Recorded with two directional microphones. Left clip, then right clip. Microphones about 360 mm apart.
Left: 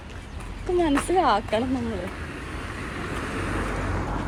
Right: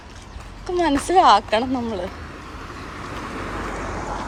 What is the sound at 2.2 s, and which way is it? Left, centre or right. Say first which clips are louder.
Vehicle: left 1 dB; centre.